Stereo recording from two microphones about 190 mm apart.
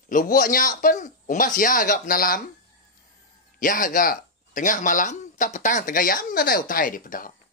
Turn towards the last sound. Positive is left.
turn(degrees=45)  # may be behind; listen again after turning